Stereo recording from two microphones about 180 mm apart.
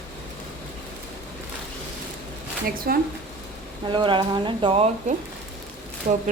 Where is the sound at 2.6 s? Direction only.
55° right (ahead or behind).